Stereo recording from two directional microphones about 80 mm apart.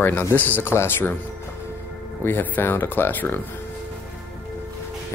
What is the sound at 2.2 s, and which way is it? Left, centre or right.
Speech, left.